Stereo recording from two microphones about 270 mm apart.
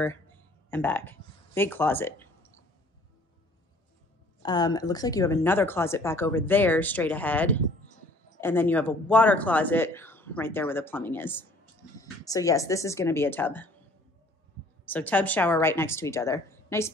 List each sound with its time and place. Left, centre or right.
0.7 s speech: centre
4.4 s speech: centre
14.9 s speech: centre